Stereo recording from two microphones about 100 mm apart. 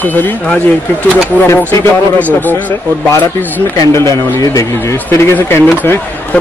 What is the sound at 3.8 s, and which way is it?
Speech, 30° left (ahead or behind).